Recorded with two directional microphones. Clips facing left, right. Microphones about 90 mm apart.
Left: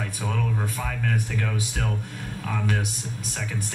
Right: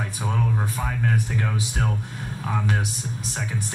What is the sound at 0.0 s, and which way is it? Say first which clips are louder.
Speech: right 2 dB; 25° right (ahead or behind).